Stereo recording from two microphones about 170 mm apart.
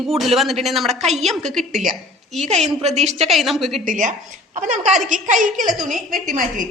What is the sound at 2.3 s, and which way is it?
Speech, 40° right (ahead or behind).